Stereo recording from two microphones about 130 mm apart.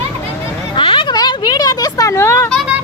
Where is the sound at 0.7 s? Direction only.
40° left (ahead or behind); by 2.4 s 20° left (ahead or behind).